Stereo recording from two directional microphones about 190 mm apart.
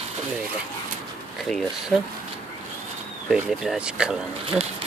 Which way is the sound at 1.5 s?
Centre (ahead or behind).